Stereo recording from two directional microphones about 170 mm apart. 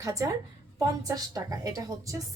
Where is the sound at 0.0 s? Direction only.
20° right (ahead or behind).